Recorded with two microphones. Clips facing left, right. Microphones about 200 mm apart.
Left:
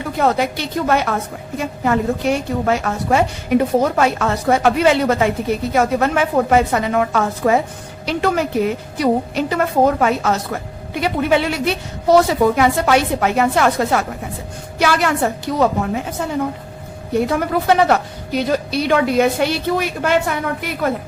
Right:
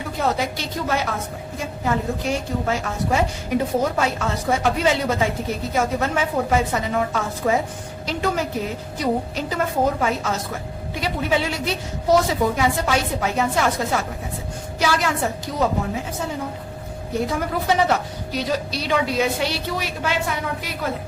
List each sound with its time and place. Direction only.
0.2 s a woman's voice: 60° left (ahead or behind)
17.2 s a woman's voice: 65° left (ahead or behind)